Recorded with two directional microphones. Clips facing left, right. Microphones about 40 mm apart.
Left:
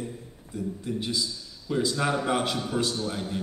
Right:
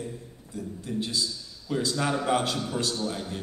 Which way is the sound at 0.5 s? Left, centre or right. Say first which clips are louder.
Left 1 dB; left.